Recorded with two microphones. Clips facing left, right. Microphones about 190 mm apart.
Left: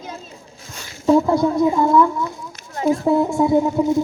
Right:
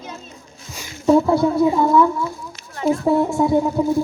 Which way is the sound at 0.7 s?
5° right (ahead or behind).